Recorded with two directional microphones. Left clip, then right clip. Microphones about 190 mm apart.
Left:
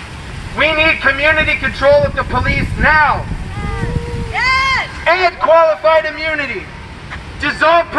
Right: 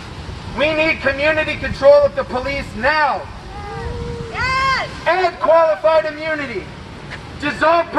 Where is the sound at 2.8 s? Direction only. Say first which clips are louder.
Left 5 dB; 40° right (ahead or behind).